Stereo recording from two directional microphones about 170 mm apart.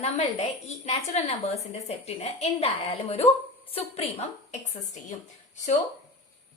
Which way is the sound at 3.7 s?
35° left (ahead or behind).